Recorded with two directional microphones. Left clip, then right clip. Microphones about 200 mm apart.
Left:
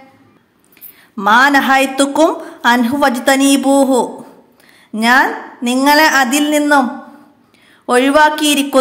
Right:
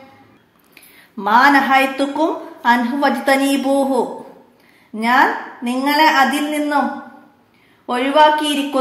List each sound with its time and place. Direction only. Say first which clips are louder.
1.1 s a woman's voice: left 2 dB; 30° left (ahead or behind)
7.8 s a woman's voice: left 3 dB; 45° left (ahead or behind)